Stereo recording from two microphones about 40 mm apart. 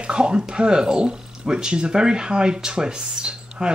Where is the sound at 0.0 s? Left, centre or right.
Right.